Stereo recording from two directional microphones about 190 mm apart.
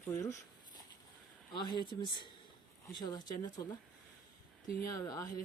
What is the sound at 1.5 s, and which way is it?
Speech, 25° left (ahead or behind).